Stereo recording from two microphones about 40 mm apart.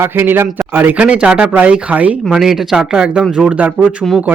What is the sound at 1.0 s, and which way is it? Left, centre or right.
Speech, right.